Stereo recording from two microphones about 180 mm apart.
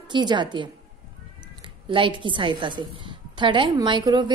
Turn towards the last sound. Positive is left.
turn(degrees=-25)  # may be behind; listen again after turning